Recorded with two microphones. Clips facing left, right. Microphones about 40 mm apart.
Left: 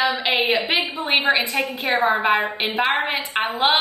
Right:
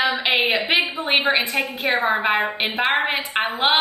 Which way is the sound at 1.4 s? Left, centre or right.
Right.